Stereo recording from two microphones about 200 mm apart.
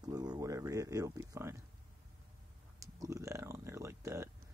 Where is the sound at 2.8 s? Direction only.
15° right (ahead or behind).